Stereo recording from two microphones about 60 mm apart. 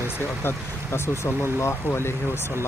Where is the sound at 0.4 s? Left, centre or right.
Left.